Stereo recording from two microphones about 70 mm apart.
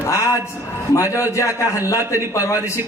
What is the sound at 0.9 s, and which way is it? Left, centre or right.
Speech, left.